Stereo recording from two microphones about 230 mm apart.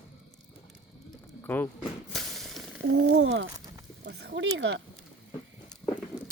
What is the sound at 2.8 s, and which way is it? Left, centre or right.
Speech, right.